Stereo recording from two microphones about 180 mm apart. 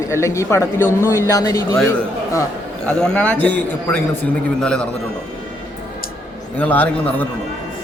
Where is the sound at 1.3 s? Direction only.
20° left (ahead or behind).